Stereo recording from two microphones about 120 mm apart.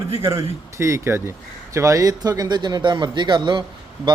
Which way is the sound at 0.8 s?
25° right (ahead or behind).